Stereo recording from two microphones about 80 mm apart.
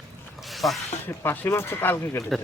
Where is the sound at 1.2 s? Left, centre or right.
Left.